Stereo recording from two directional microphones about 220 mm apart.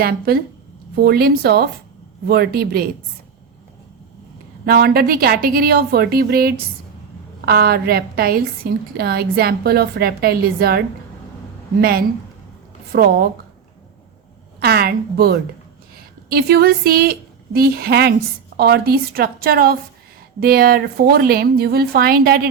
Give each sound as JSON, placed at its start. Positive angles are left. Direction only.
{"t": 0.0, "sound": "speech", "side_deg": -45}
{"t": 4.6, "sound": "speech", "side_deg": -45}
{"t": 14.6, "sound": "speech", "side_deg": -45}